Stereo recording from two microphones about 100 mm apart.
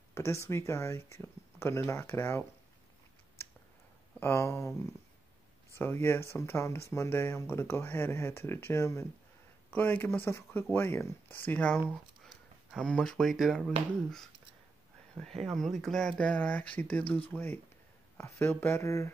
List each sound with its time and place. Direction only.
0.1 s speech: 30° left (ahead or behind)
4.2 s speech: 25° left (ahead or behind)
5.8 s speech: 25° left (ahead or behind)
9.7 s speech: 15° left (ahead or behind)
11.9 s speech: centre (ahead or behind)
15.4 s speech: 5° left (ahead or behind); by 19.0 s 30° left (ahead or behind)